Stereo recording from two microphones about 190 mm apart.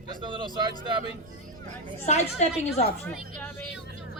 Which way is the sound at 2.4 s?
35° left (ahead or behind).